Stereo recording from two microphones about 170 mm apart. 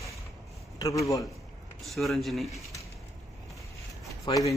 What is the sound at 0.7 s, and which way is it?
Speech, 20° left (ahead or behind).